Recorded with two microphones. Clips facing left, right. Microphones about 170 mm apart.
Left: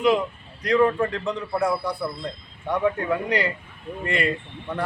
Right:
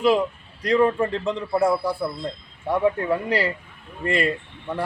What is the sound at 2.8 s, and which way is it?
A man's voice, 30° right (ahead or behind).